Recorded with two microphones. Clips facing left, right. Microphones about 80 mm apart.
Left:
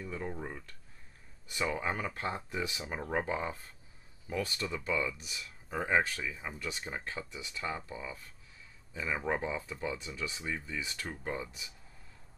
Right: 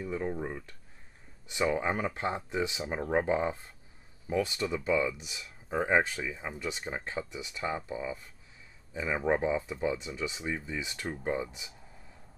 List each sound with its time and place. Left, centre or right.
0.0 s speech: centre